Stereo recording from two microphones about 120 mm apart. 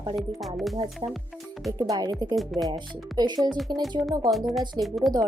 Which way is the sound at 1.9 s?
30° right (ahead or behind).